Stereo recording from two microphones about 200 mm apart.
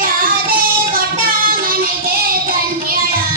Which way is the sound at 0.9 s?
45° right (ahead or behind).